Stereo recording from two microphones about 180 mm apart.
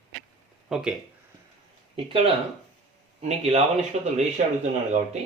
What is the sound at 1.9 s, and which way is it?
Speech, 30° right (ahead or behind).